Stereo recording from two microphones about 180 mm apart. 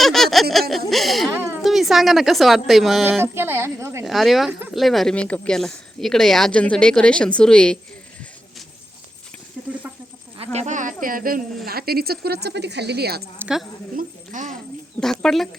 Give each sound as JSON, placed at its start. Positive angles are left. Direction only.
{"t": 0.0, "sound": "a sound", "side_deg": 0}
{"t": 0.9, "sound": "speech", "side_deg": 0}
{"t": 3.1, "sound": "a woman's voice", "side_deg": -10}
{"t": 4.0, "sound": "speech", "side_deg": 0}
{"t": 10.3, "sound": "speech", "side_deg": -35}
{"t": 13.4, "sound": "speech", "side_deg": 0}
{"t": 13.9, "sound": "a sound", "side_deg": -45}
{"t": 15.0, "sound": "speech", "side_deg": 5}